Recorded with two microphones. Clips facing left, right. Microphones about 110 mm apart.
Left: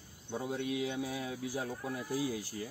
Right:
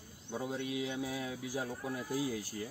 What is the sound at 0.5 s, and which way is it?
Speech, 25° right (ahead or behind).